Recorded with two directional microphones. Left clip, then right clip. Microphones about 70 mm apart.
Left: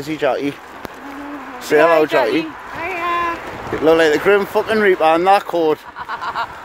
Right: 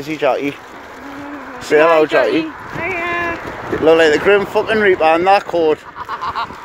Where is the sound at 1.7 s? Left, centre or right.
Left.